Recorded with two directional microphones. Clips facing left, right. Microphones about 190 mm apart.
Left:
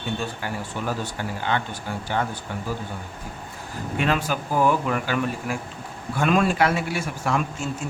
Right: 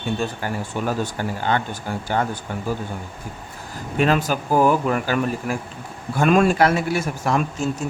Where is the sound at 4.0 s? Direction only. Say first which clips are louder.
Right 5 dB; 40° right (ahead or behind).